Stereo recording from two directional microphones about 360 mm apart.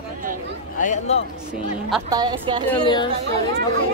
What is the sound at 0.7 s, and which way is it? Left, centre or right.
Speech, centre.